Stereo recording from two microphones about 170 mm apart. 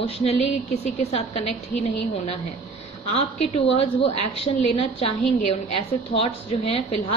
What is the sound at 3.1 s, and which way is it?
A woman's voice, 40° left (ahead or behind).